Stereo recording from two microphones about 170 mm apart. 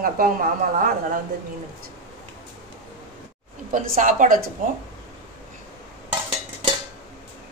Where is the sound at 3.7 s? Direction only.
50° right (ahead or behind).